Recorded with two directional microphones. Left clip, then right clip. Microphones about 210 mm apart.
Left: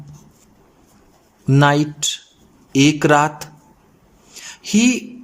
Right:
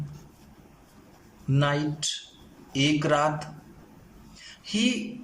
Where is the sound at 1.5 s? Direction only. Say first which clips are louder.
Left 11 dB; 55° left (ahead or behind).